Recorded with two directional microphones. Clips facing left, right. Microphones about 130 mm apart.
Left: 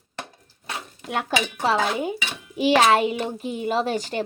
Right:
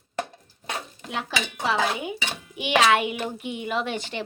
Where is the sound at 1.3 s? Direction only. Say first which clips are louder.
Left 4 dB; 50° left (ahead or behind).